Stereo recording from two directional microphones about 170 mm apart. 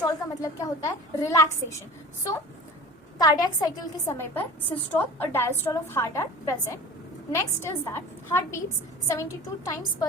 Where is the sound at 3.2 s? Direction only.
20° left (ahead or behind).